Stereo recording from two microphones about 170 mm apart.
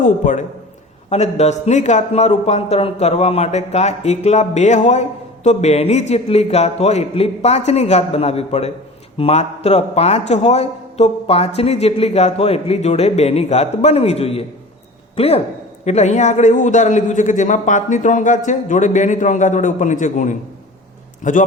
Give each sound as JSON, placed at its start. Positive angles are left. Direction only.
{"t": 0.0, "sound": "a man's voice", "side_deg": 45}